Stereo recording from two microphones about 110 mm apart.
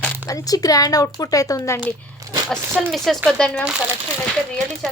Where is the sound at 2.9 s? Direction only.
Centre (ahead or behind).